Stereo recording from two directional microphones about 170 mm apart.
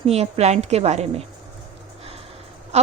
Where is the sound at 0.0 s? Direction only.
40° right (ahead or behind).